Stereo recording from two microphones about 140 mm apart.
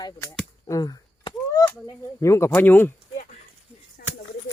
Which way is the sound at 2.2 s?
20° left (ahead or behind).